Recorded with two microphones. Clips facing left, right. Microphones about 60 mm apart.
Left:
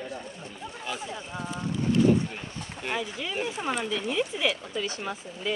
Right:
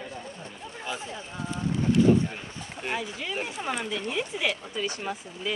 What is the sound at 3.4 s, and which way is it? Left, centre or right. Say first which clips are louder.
Speech: left 2 dB; right.